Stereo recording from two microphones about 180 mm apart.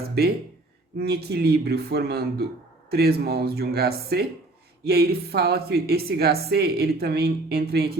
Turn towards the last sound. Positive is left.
turn(degrees=-60)  # may be behind; listen again after turning